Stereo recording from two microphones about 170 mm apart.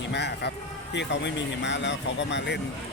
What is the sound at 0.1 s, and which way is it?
A man's voice, 85° left.